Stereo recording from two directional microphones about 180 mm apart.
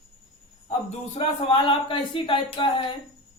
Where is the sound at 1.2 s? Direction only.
30° left (ahead or behind).